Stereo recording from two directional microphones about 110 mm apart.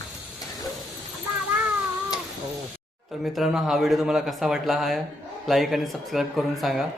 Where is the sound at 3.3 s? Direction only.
5° right (ahead or behind).